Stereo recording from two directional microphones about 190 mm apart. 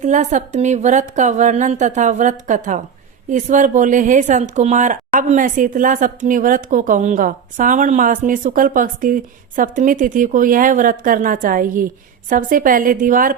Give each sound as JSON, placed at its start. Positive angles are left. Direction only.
{"t": 0.0, "sound": "a woman's voice", "side_deg": -40}